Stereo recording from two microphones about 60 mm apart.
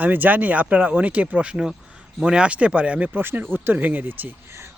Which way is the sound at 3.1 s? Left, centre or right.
Right.